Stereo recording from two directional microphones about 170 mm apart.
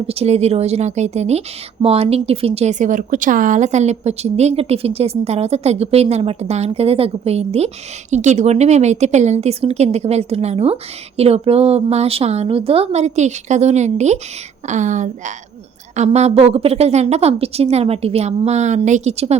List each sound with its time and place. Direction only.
0.1 s a woman's voice: 35° right (ahead or behind)